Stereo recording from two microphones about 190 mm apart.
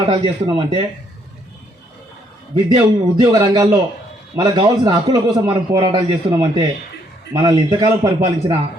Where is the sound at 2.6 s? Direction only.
20° right (ahead or behind).